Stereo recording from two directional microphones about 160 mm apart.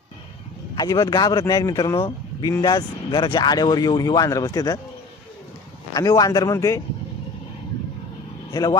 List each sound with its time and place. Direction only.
0.7 s speech: 25° left (ahead or behind)
5.9 s speech: 25° left (ahead or behind)